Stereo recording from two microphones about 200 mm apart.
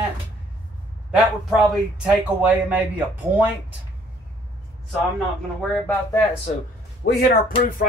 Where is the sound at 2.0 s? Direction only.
5° right (ahead or behind).